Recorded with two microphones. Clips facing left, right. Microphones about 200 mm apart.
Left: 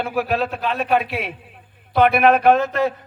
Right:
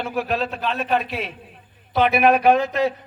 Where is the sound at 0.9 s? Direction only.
60° left (ahead or behind).